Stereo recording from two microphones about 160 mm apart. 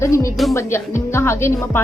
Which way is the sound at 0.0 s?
20° left (ahead or behind).